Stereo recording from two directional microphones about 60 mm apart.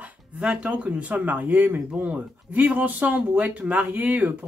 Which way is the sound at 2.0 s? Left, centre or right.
Right.